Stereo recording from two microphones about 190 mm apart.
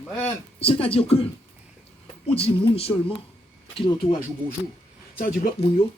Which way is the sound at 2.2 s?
30° left (ahead or behind).